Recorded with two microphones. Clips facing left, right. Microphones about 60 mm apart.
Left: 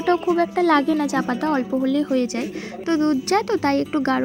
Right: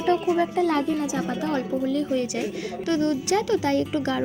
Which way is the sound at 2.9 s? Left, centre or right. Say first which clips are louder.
Left 4 dB; left.